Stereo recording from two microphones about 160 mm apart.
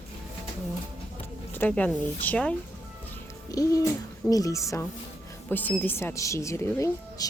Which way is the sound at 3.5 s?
20° left (ahead or behind).